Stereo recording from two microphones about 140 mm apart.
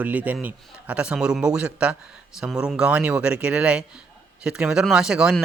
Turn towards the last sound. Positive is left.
turn(degrees=-5)  # may be behind; listen again after turning